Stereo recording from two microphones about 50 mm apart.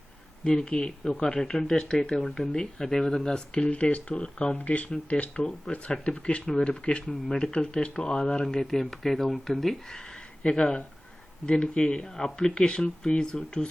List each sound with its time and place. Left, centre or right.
0.4 s speech: centre
6.4 s speech: centre
6.7 s speech: left; by 9.7 s centre
10.4 s speech: centre